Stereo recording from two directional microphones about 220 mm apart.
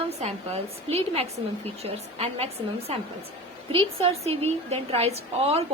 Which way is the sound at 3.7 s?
30° right (ahead or behind).